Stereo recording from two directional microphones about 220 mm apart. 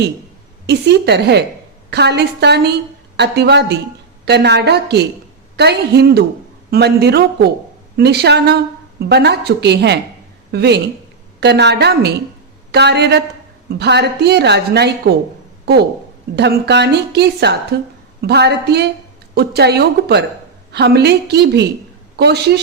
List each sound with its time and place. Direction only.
0.7 s a woman's voice: 50° right (ahead or behind)
16.3 s a woman's voice: 50° right (ahead or behind)